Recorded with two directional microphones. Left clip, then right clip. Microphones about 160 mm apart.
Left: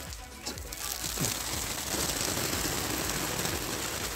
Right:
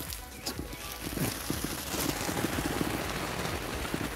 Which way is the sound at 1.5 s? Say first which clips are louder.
Left 2 dB; 30° left (ahead or behind).